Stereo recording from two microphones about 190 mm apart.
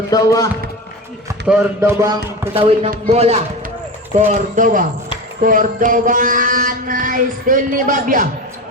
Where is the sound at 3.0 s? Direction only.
35° right (ahead or behind).